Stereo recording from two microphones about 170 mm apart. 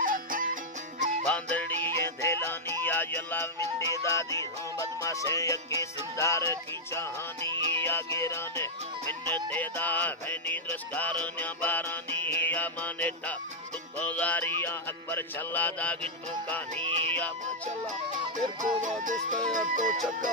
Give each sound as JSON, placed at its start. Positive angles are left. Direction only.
{"t": 0.0, "sound": "music", "side_deg": -55}
{"t": 1.2, "sound": "music", "side_deg": 10}
{"t": 7.5, "sound": "music", "side_deg": -30}
{"t": 7.8, "sound": "music", "side_deg": 15}
{"t": 16.8, "sound": "music", "side_deg": -35}
{"t": 18.3, "sound": "music", "side_deg": -50}